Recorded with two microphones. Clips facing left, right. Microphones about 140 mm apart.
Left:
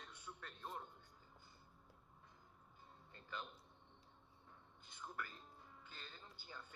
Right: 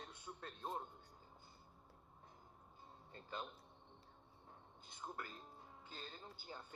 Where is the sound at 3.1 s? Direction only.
20° right (ahead or behind).